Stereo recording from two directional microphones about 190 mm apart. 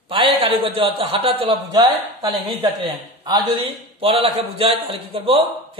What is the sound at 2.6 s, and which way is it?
A man's voice, 20° right (ahead or behind).